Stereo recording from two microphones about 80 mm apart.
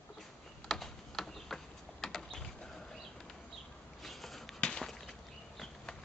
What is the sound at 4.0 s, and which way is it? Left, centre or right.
Walk, centre.